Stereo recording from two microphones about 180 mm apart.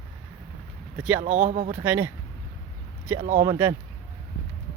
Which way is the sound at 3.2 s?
45° right (ahead or behind).